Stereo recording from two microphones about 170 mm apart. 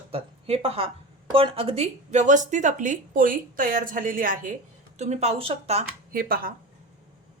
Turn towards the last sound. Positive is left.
turn(degrees=-60)  # may be behind; listen again after turning